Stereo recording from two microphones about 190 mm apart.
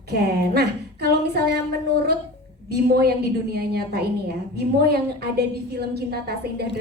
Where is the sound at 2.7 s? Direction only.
55° right (ahead or behind).